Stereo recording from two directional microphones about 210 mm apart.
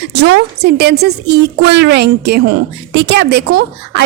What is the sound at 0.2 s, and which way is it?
Speech, 50° right (ahead or behind).